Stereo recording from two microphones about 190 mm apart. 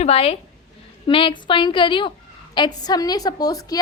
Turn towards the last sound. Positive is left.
turn(degrees=20)  # may be behind; listen again after turning